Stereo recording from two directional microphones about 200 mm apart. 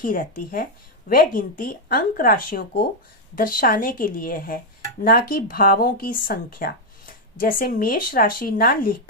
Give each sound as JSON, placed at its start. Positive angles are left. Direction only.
{"t": 0.0, "sound": "speech", "side_deg": 45}